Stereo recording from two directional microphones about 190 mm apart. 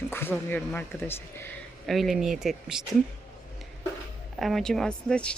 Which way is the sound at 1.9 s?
Centre (ahead or behind).